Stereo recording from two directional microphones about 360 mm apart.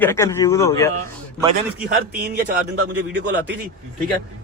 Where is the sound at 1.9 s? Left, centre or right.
Right.